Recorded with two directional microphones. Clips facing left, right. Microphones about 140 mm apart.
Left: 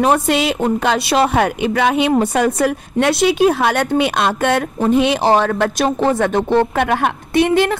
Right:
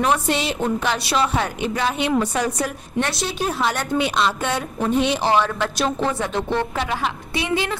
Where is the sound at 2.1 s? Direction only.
55° left (ahead or behind).